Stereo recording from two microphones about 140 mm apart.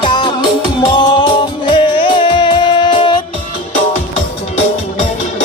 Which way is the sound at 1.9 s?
35° left (ahead or behind).